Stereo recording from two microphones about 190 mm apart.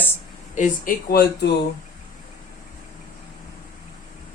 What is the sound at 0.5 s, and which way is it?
Speech, 50° left (ahead or behind).